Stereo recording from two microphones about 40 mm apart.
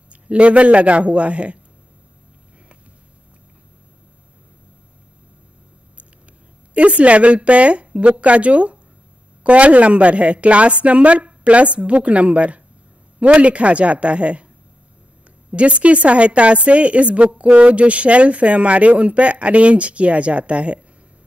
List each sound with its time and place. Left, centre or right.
0.1 s a woman's voice: right
6.7 s a woman's voice: right
15.5 s a woman's voice: right